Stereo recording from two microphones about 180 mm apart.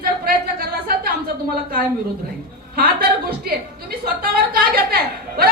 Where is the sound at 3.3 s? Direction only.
55° right (ahead or behind).